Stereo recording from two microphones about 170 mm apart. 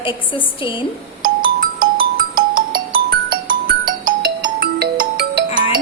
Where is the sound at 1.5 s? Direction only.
55° right (ahead or behind).